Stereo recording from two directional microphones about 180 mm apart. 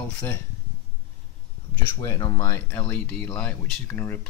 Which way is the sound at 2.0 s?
20° left (ahead or behind).